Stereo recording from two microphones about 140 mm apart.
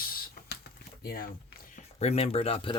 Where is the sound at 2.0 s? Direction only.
50° left (ahead or behind).